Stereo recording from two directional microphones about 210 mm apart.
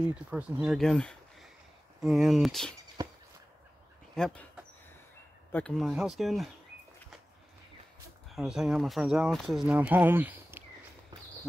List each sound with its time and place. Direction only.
0.3 s speech: 5° right (ahead or behind)
3.0 s a sound: 20° right (ahead or behind)
4.1 s speech: 5° left (ahead or behind)
5.5 s speech: 5° left (ahead or behind)
8.3 s speech: centre (ahead or behind)